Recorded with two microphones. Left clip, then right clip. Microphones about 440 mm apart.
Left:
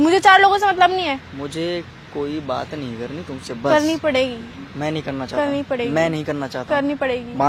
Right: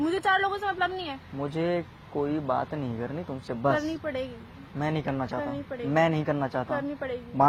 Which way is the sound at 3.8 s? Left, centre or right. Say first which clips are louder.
Left 13 dB; left.